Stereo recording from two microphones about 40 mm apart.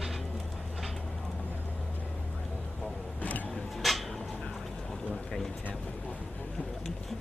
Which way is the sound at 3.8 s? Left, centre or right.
Centre.